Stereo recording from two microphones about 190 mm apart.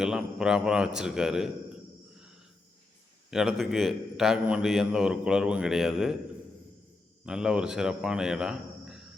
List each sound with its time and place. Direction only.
0.0 s a man's voice: 5° right (ahead or behind)
3.2 s a man's voice: centre (ahead or behind)
7.3 s speech: 5° right (ahead or behind)